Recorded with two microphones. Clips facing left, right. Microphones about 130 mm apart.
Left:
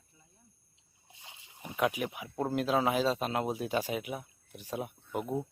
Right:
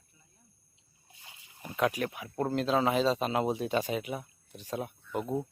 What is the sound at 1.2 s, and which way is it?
Speech, 20° left (ahead or behind).